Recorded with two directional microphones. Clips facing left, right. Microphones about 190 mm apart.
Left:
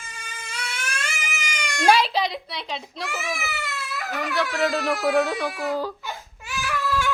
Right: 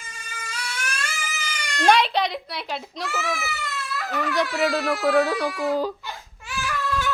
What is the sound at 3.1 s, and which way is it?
Speech, 15° left (ahead or behind).